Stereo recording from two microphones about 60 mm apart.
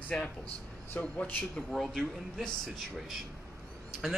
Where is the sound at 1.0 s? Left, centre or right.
Left.